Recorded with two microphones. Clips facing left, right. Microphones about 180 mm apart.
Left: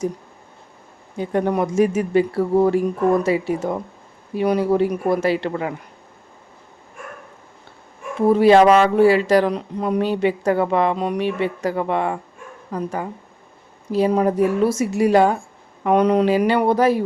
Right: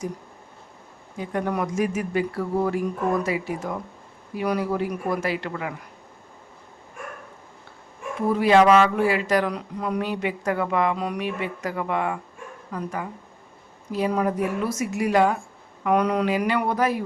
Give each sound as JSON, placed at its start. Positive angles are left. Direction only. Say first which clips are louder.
{"t": 1.1, "sound": "speech", "louder": "left 6 dB", "side_deg": 30}
{"t": 8.3, "sound": "a woman's voice", "louder": "left 5 dB", "side_deg": 30}